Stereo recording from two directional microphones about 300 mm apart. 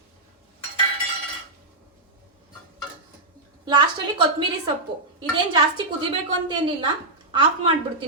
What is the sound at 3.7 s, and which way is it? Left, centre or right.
Speech, centre.